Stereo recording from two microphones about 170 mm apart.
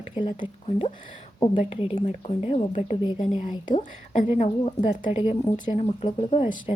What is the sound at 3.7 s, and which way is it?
Speech, 45° left (ahead or behind).